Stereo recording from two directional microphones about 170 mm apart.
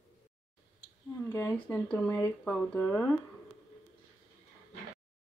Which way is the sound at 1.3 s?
15° left (ahead or behind).